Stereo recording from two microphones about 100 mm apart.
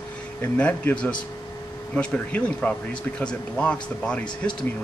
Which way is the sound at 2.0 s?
10° left (ahead or behind).